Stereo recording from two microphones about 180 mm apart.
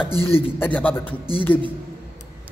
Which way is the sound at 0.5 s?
10° left (ahead or behind).